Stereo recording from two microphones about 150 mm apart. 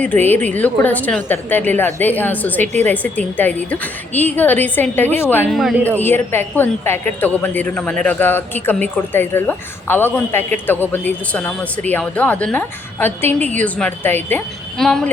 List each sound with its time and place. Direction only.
0.0 s a woman's voice: 15° left (ahead or behind)
5.5 s speech: centre (ahead or behind)
5.7 s speech: 15° right (ahead or behind)
6.0 s a woman's voice: 15° left (ahead or behind)